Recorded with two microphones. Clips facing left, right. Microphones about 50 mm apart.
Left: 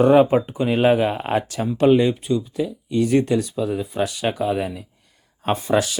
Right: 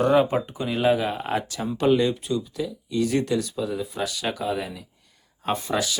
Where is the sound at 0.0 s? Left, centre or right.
Left.